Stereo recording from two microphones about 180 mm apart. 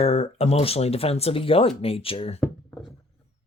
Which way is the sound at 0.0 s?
35° left (ahead or behind).